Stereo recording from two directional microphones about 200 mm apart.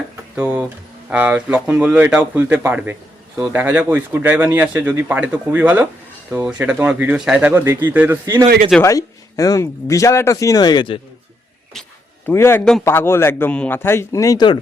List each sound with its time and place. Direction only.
0.3 s speech: 10° right (ahead or behind)
8.8 s speech: 15° left (ahead or behind)
12.3 s speech: 10° left (ahead or behind)